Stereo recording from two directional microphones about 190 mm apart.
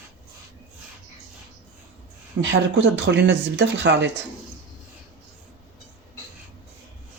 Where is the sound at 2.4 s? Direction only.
75° right (ahead or behind).